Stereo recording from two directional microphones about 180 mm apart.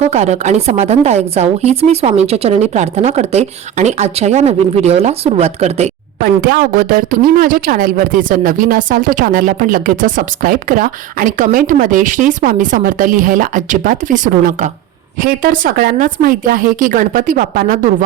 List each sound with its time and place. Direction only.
0.0 s speech: 40° right (ahead or behind)
6.4 s speech: 55° right (ahead or behind)